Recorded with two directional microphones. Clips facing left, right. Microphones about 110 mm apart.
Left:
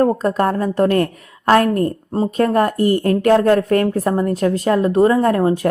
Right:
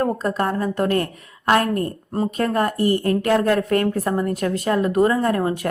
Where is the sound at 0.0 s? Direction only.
40° left (ahead or behind).